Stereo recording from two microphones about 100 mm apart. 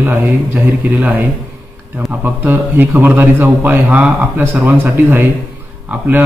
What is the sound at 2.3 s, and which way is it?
A man's voice, 20° right (ahead or behind).